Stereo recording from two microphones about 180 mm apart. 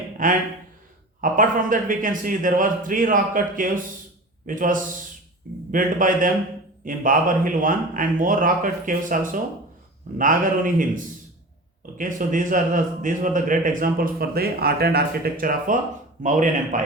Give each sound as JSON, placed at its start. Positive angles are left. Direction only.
{"t": 0.2, "sound": "a man's voice", "side_deg": -45}